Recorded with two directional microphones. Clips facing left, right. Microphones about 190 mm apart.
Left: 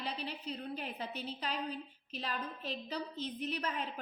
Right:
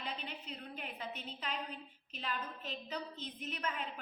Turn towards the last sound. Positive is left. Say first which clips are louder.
# left 4 dB
turn(degrees=35)  # may be behind; listen again after turning